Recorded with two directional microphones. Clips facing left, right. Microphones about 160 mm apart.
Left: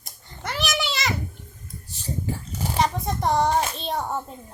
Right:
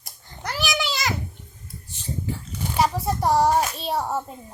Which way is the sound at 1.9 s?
40° left (ahead or behind).